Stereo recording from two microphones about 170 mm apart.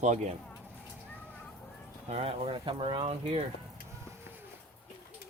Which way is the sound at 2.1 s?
35° right (ahead or behind).